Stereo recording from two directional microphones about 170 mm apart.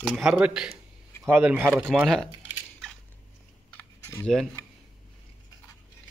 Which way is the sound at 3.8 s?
15° left (ahead or behind).